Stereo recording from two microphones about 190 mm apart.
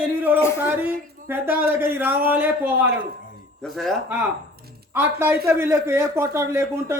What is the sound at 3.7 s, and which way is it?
Speech, centre (ahead or behind).